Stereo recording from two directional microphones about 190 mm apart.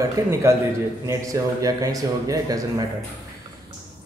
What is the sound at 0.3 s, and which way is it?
A man's voice, 15° right (ahead or behind).